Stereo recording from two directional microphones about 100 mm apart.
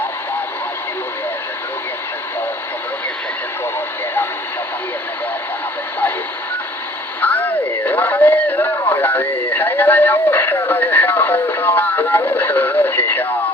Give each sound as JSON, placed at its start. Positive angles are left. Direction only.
{"t": 7.2, "sound": "radio", "side_deg": 15}